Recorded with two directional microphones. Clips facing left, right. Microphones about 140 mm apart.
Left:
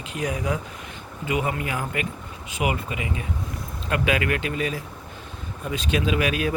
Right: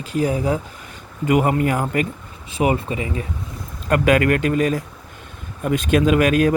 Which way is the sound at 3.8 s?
50° right (ahead or behind).